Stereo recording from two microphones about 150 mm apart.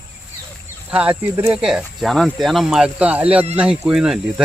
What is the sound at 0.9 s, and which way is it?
Speech, 10° right (ahead or behind).